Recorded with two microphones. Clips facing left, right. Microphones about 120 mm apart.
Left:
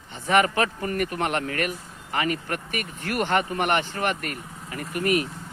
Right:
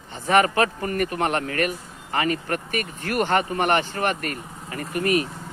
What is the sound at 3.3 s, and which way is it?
Speech, 25° right (ahead or behind).